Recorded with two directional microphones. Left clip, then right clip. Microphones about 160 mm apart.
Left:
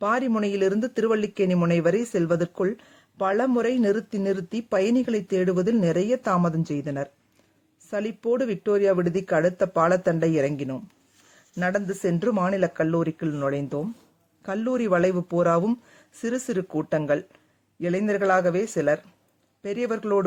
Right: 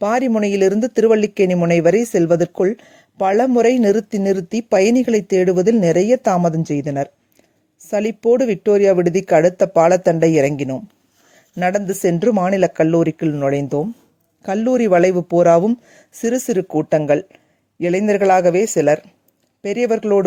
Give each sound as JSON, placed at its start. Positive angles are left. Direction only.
{"t": 0.0, "sound": "speech", "side_deg": -35}